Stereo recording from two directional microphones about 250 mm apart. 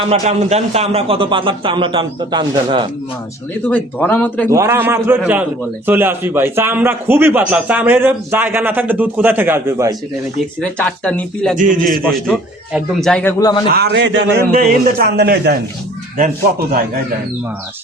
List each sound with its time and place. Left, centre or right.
0.1 s a man's voice: right
3.7 s speech: centre
4.4 s a man's voice: centre
10.6 s a man's voice: centre
11.5 s a man's voice: right
11.9 s a man's voice: centre
13.4 s speech: centre
13.7 s a man's voice: right